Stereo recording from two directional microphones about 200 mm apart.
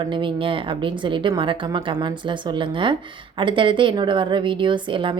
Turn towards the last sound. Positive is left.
turn(degrees=-25)  # may be behind; listen again after turning